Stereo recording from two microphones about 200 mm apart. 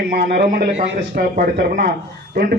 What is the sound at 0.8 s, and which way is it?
Speech, 40° right (ahead or behind).